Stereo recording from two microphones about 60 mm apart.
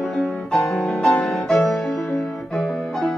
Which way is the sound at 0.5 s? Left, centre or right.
Centre.